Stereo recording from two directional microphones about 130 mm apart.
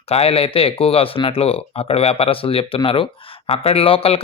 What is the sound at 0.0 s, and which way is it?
Speech, 50° left (ahead or behind).